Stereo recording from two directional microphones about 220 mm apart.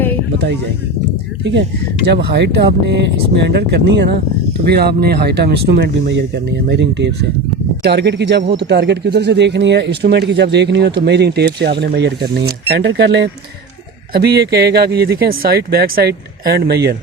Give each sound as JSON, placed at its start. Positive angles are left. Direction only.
{"t": 2.0, "sound": "speech", "side_deg": -50}